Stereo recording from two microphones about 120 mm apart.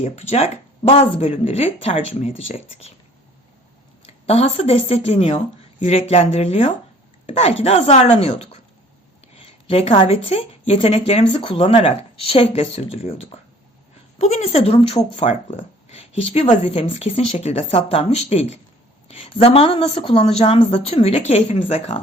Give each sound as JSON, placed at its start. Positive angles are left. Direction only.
{"t": 0.0, "sound": "speech", "side_deg": 65}
{"t": 4.0, "sound": "speech", "side_deg": 60}